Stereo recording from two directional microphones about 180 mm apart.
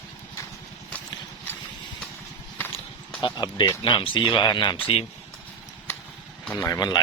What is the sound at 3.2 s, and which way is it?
Speech, 25° left (ahead or behind).